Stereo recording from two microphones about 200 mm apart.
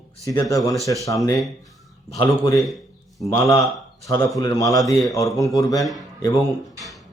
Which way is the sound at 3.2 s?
15° left (ahead or behind).